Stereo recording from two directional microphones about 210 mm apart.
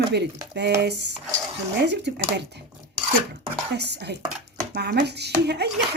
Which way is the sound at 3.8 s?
55° right (ahead or behind).